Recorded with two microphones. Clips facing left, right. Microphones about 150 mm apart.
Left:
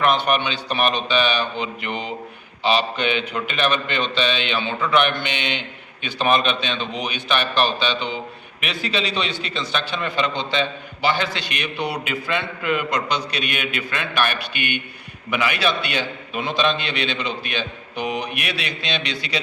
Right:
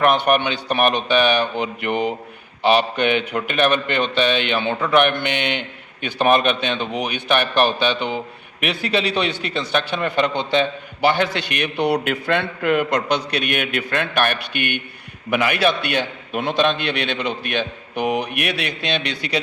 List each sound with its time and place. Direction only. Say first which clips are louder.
0.0 s a man's voice: right 3 dB; 55° right (ahead or behind)